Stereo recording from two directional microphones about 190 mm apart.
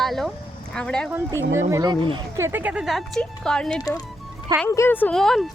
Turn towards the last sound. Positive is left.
turn(degrees=0)  # may be behind; listen again after turning